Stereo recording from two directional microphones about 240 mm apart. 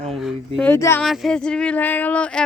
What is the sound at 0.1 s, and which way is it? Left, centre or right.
Speech, centre.